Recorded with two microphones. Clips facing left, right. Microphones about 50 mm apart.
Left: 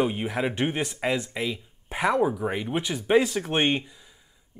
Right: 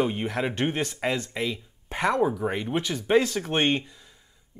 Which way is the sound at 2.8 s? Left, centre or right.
Centre.